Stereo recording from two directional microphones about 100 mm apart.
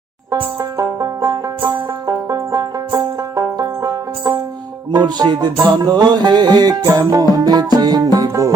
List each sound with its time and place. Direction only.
0.3 s banjo: 35° right (ahead or behind)
4.9 s music: 45° right (ahead or behind)